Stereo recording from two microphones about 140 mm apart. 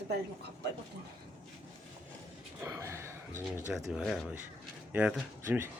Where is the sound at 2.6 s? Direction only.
20° right (ahead or behind).